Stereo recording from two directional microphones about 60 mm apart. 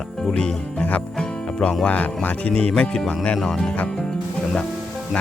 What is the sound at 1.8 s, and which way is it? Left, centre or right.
Speech, left.